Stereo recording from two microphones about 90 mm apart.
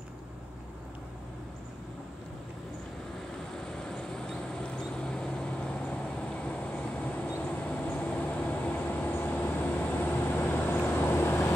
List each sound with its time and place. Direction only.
3.5 s vehicle: 5° left (ahead or behind); by 11.5 s 25° left (ahead or behind)